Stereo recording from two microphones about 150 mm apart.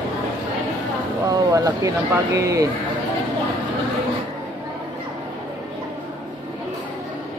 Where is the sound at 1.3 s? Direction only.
25° right (ahead or behind).